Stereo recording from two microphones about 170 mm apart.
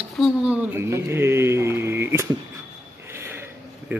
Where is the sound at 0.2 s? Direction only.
10° right (ahead or behind).